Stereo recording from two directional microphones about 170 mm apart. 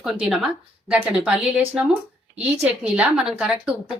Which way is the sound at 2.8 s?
5° right (ahead or behind).